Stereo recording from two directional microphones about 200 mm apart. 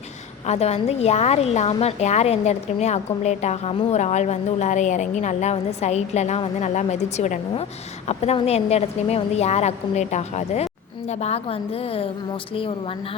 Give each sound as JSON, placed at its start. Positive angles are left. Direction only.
{"t": 0.4, "sound": "a woman's voice", "side_deg": 35}